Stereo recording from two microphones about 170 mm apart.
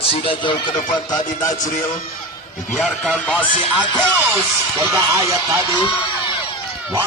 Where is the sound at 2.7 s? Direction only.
Centre (ahead or behind).